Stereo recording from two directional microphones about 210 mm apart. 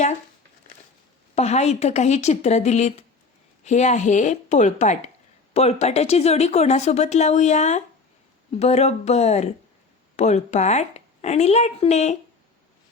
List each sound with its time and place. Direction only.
1.4 s speech: 30° left (ahead or behind)